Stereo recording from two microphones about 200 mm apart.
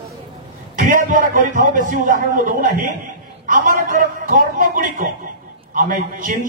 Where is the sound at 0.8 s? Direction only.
40° right (ahead or behind).